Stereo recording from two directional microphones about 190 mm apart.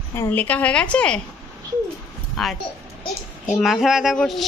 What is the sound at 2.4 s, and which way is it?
Speech, centre (ahead or behind).